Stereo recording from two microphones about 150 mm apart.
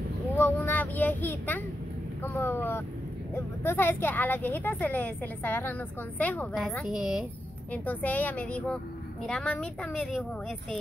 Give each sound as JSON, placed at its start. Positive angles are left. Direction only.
{"t": 0.4, "sound": "a woman's voice", "side_deg": 10}
{"t": 6.9, "sound": "a woman's voice", "side_deg": -5}
{"t": 7.7, "sound": "a woman's voice", "side_deg": 10}